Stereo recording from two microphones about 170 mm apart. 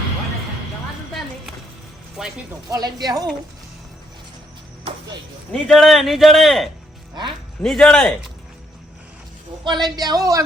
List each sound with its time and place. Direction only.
2.2 s a man's voice: 5° right (ahead or behind)
2.6 s a man's voice: 25° right (ahead or behind)
5.5 s a man's voice: centre (ahead or behind)
9.6 s a man's voice: 25° right (ahead or behind)